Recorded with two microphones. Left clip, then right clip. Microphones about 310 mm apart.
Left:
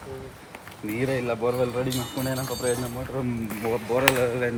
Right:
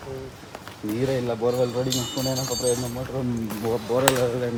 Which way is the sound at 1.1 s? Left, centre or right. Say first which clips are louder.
Right 1 dB; centre.